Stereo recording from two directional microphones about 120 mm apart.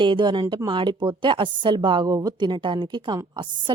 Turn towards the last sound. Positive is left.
turn(degrees=-40)  # may be behind; listen again after turning